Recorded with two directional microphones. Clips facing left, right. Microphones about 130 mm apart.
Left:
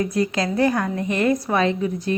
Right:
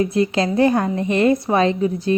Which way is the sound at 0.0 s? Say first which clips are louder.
Right 4 dB; 25° right (ahead or behind).